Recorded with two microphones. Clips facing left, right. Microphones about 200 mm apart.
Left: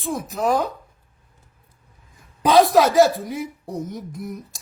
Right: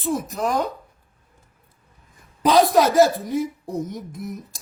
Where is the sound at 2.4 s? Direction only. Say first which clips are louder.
Left 1 dB; centre (ahead or behind).